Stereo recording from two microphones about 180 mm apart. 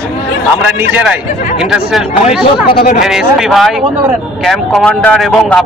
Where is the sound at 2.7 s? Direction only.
55° left (ahead or behind).